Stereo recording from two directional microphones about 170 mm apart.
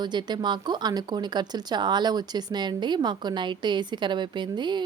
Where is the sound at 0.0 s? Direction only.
25° right (ahead or behind).